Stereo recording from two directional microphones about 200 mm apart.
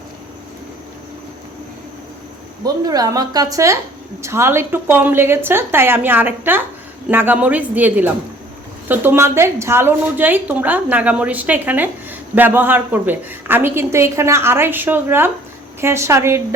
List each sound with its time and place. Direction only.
2.6 s a woman's voice: 20° right (ahead or behind)